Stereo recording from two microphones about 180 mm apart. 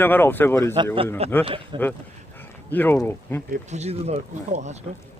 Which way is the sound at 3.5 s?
40° right (ahead or behind).